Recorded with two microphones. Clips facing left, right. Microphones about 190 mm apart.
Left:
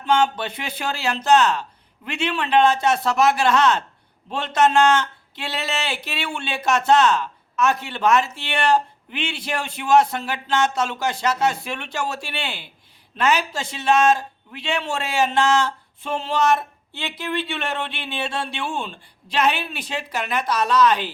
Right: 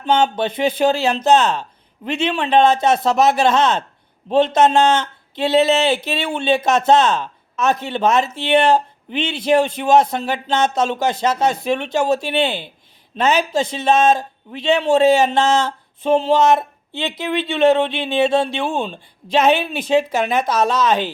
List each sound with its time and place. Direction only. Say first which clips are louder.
0.0 s speech: right 3 dB; 25° right (ahead or behind)